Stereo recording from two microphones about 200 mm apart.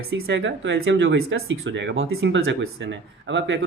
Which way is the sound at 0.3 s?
65° right (ahead or behind).